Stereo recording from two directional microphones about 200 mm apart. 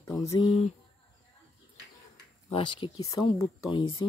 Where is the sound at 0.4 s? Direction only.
35° left (ahead or behind).